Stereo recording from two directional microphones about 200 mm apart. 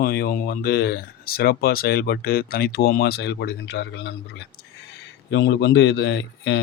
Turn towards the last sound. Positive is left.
turn(degrees=65)  # may be behind; listen again after turning